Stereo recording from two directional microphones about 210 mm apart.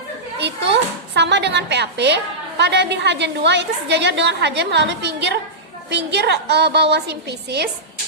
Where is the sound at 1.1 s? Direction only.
55° right (ahead or behind).